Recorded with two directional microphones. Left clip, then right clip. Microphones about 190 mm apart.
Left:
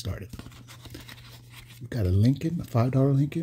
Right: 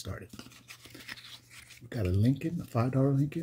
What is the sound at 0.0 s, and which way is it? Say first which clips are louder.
Speech: left 4 dB; 25° left (ahead or behind).